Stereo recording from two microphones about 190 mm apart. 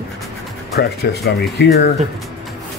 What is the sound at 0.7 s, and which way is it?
Speech, 55° left (ahead or behind).